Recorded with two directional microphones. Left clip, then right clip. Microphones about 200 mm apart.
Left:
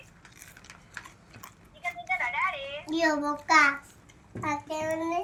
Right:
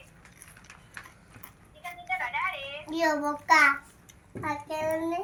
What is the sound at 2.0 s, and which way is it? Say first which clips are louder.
Music: left 1 dB; 20° left (ahead or behind).